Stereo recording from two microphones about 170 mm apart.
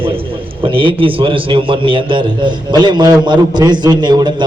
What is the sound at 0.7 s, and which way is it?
A man's voice, 30° right (ahead or behind).